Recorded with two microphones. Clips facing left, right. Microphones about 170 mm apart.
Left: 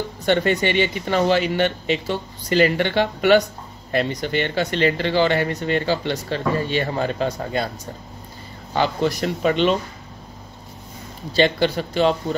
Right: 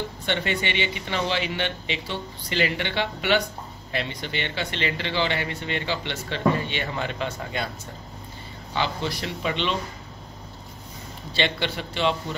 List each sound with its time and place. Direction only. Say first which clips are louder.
0.2 s speech: left 9 dB; 45° left (ahead or behind)
11.3 s a man's voice: left 8 dB; 40° left (ahead or behind)